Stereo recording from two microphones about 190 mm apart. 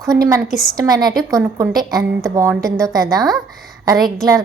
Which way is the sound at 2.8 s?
20° right (ahead or behind).